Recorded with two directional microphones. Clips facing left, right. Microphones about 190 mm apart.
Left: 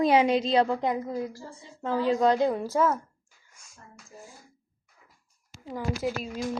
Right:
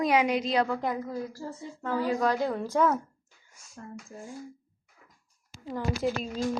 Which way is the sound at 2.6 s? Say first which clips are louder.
Even; 5° left (ahead or behind).